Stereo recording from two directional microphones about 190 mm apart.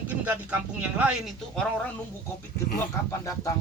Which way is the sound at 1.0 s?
5° right (ahead or behind).